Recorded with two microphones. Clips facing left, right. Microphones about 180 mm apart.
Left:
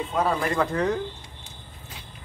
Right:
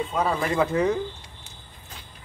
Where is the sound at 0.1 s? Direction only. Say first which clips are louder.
Left 2 dB; centre (ahead or behind).